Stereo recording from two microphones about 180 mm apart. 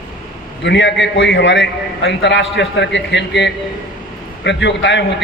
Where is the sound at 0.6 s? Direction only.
80° left.